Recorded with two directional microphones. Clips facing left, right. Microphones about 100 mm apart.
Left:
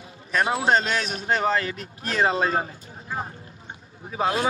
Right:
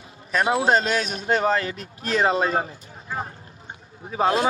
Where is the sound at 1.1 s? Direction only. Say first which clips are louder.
Right 1 dB; 25° right (ahead or behind).